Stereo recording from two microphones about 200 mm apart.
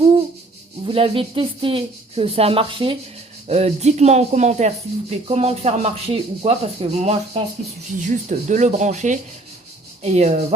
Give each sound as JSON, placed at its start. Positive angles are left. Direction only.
{"t": 0.9, "sound": "speech", "side_deg": -25}